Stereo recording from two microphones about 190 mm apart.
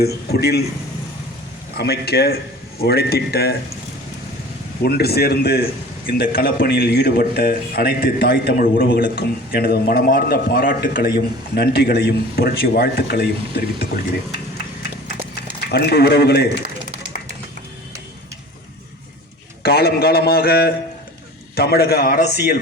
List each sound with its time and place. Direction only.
0.0 s a man's voice: 55° left (ahead or behind)
1.7 s a man's voice: 55° left (ahead or behind)
4.8 s a man's voice: 55° left (ahead or behind)
15.7 s a man's voice: 55° left (ahead or behind)
16.6 s a sound: 70° right (ahead or behind)
19.6 s a man's voice: 55° left (ahead or behind)